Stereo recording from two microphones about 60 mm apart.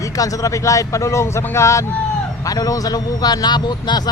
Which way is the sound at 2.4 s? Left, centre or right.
Left.